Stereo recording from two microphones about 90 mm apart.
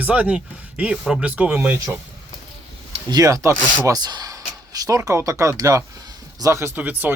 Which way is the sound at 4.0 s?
50° right (ahead or behind).